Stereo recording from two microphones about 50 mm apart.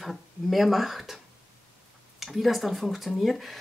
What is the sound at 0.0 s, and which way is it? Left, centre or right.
Speech, centre.